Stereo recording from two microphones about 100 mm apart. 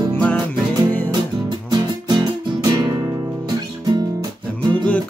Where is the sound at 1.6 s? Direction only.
45° right (ahead or behind).